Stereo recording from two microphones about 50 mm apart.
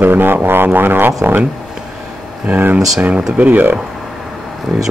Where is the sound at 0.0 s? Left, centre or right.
Right.